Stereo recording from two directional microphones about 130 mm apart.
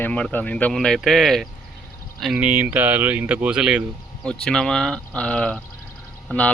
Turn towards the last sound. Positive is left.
turn(degrees=10)  # may be behind; listen again after turning